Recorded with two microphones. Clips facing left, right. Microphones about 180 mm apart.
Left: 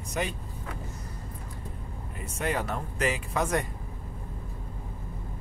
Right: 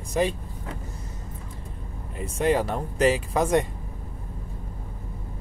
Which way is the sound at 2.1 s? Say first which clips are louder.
Right 8 dB; 30° right (ahead or behind).